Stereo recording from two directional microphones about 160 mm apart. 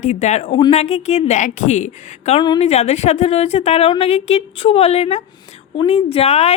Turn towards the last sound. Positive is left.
turn(degrees=40)  # may be behind; listen again after turning